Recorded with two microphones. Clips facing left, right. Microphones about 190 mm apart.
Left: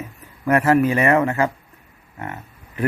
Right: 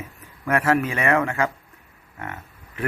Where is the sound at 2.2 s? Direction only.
35° left (ahead or behind).